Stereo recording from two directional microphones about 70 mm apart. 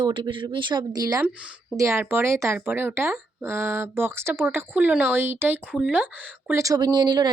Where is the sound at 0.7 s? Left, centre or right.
Right.